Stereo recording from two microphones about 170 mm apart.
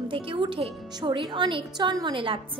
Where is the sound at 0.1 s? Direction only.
30° right (ahead or behind).